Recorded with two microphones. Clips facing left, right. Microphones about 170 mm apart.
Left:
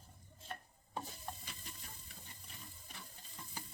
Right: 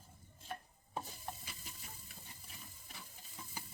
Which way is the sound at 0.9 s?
5° right (ahead or behind).